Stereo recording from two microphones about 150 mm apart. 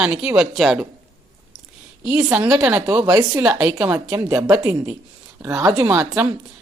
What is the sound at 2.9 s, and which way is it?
Speech, 25° right (ahead or behind).